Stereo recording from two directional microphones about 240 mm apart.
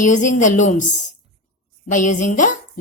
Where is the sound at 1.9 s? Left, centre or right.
Left.